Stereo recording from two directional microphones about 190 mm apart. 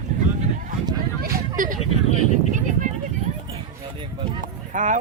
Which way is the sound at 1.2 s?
45° right (ahead or behind).